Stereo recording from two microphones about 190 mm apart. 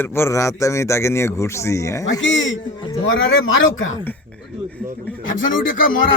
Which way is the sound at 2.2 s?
80° left.